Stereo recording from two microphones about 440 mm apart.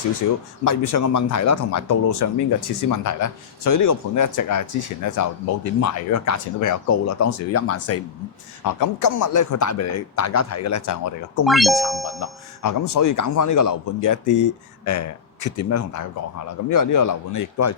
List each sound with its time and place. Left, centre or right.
0.6 s speech: left
8.6 s speech: left
11.4 s speech: centre
12.2 s speech: left